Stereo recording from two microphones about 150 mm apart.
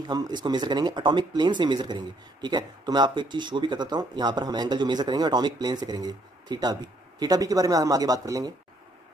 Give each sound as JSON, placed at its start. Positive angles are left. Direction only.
{"t": 0.1, "sound": "speech", "side_deg": -30}